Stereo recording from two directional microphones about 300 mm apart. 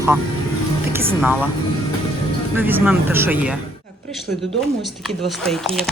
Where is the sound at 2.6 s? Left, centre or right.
Centre.